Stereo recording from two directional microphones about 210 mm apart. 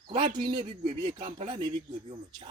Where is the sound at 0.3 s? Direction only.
25° right (ahead or behind).